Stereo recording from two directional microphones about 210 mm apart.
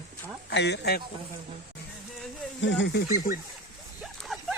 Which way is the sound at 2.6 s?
55° left (ahead or behind).